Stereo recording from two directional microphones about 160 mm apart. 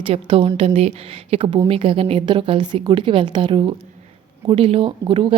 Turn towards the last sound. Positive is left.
turn(degrees=-30)  # may be behind; listen again after turning